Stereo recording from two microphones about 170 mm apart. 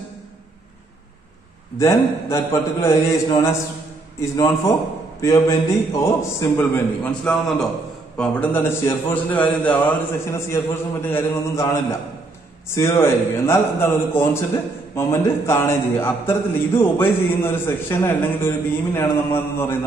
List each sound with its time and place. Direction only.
1.8 s a man's voice: 15° left (ahead or behind)